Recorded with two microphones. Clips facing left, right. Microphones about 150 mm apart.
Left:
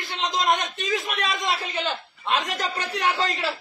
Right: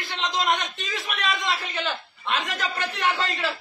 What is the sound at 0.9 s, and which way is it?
A man's voice, 40° left (ahead or behind).